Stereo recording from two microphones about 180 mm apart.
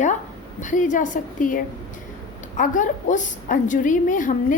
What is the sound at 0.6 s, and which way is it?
A woman's voice, 45° left (ahead or behind).